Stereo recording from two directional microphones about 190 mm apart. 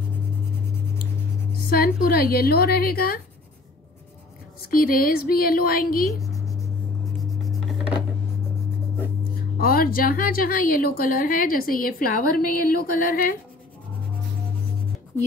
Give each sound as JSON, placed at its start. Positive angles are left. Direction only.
{"t": 1.7, "sound": "a woman's voice", "side_deg": 50}
{"t": 4.6, "sound": "a woman's voice", "side_deg": 50}
{"t": 6.3, "sound": "writing", "side_deg": 15}
{"t": 9.6, "sound": "a woman's voice", "side_deg": 50}